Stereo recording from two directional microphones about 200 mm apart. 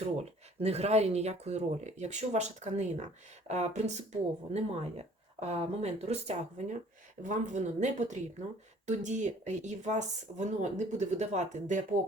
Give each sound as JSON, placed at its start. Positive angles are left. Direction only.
{"t": 0.0, "sound": "speech", "side_deg": -30}